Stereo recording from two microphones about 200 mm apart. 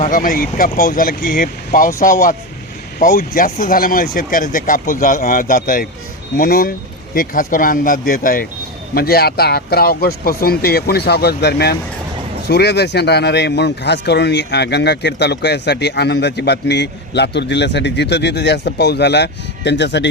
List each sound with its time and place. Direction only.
0.0 s a man's voice: 40° left (ahead or behind); by 20.1 s 60° left (ahead or behind)